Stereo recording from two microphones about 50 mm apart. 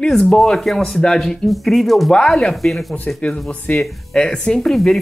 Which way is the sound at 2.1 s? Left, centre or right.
Centre.